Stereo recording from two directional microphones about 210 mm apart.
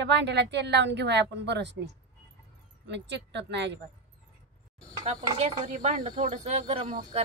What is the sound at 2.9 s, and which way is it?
Speech, 55° right (ahead or behind).